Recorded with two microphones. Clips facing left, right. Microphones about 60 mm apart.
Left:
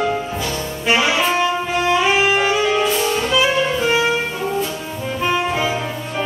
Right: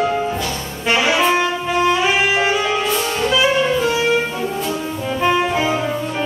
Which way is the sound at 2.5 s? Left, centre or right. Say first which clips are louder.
Left 1 dB; centre.